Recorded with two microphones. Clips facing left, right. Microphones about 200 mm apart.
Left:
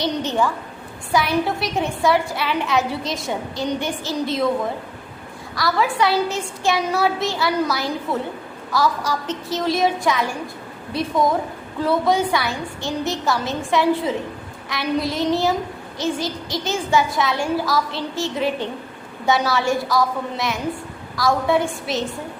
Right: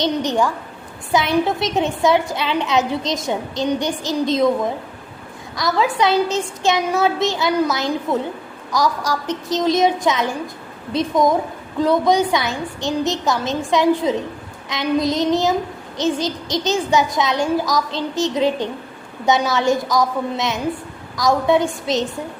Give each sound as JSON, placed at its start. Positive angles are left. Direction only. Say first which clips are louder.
{"t": 0.0, "sound": "a woman's voice", "louder": "right 2 dB", "side_deg": -15}
{"t": 5.5, "sound": "a woman's voice", "louder": "right 2 dB", "side_deg": -20}